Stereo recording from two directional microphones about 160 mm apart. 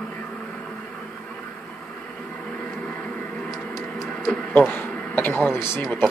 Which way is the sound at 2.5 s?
5° left (ahead or behind).